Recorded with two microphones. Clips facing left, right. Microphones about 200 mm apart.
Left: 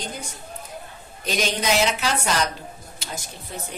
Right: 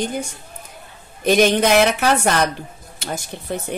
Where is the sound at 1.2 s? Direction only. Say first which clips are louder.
Right 9 dB; 60° right (ahead or behind).